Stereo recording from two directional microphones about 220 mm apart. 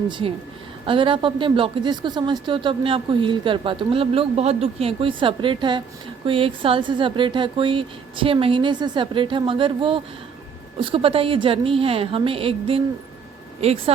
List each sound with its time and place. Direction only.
0.1 s a woman's voice: 25° right (ahead or behind)